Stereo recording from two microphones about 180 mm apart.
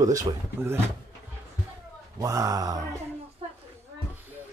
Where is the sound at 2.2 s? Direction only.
20° right (ahead or behind).